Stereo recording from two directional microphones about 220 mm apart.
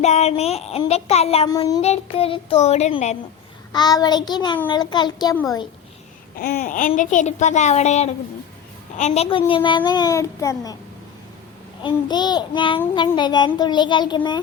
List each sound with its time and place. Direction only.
0.0 s child singing: 30° left (ahead or behind)
1.8 s child singing: 25° left (ahead or behind)
3.7 s child singing: 15° left (ahead or behind)
5.4 s a child's voice: 15° left (ahead or behind)
6.4 s a child's voice: 40° left (ahead or behind)
9.0 s child singing: 30° left (ahead or behind)
11.8 s child singing: 20° left (ahead or behind)